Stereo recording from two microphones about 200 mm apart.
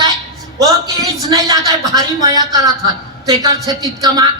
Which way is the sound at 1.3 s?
20° right (ahead or behind).